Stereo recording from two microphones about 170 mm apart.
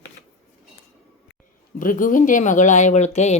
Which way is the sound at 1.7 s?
50° left (ahead or behind).